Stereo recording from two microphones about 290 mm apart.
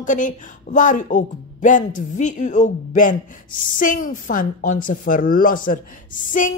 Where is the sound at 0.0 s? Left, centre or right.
Left.